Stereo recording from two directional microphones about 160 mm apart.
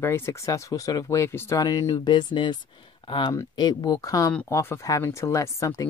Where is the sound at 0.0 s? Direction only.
15° left (ahead or behind).